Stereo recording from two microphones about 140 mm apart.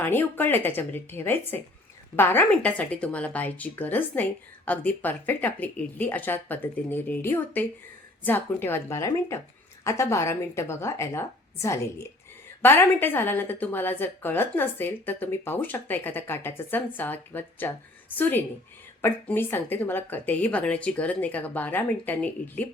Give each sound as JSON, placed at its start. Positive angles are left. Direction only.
{"t": 0.0, "sound": "a woman's voice", "side_deg": 15}